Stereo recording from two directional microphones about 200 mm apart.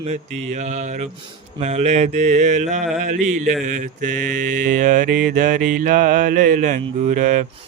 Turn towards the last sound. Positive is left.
turn(degrees=-40)  # may be behind; listen again after turning